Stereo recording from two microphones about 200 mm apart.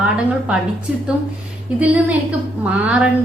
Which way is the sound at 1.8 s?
5° right (ahead or behind).